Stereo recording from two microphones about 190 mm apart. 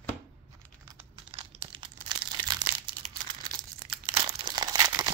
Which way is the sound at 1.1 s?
30° right (ahead or behind).